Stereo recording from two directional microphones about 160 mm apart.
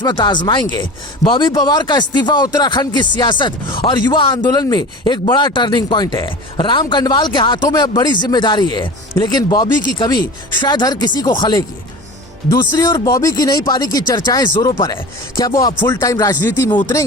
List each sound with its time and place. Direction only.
0.0 s speech: 30° left (ahead or behind)
12.8 s speech: 25° left (ahead or behind)
16.4 s speech: 15° left (ahead or behind)